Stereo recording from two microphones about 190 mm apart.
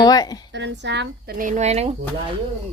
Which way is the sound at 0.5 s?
70° right (ahead or behind).